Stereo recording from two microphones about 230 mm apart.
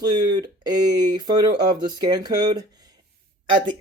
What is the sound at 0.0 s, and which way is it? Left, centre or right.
Speech, centre.